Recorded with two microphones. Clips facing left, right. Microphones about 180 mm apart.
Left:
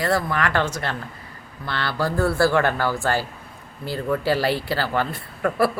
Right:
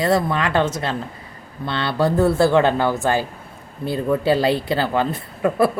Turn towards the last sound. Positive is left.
turn(degrees=-20)  # may be behind; listen again after turning